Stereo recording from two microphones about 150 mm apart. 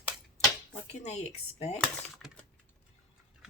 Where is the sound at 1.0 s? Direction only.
45° left (ahead or behind).